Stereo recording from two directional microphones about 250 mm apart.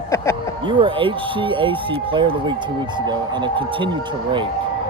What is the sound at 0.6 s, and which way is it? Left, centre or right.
Speech, centre.